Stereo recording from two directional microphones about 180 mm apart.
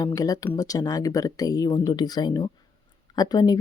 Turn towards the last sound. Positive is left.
turn(degrees=20)  # may be behind; listen again after turning